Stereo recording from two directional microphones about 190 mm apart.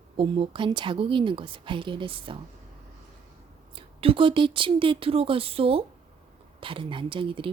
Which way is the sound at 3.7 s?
30° right (ahead or behind).